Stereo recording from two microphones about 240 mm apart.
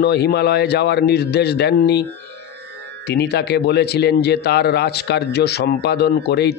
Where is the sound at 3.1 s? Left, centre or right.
Left.